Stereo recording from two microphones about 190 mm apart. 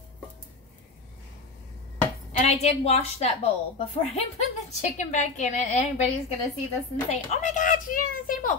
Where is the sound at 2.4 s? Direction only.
35° left (ahead or behind).